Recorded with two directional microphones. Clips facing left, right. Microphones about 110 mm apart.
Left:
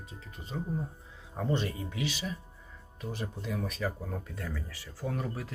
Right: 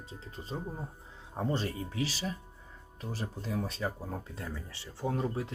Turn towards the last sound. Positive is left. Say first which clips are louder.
# right 3 dB
turn(degrees=-25)  # may be behind; listen again after turning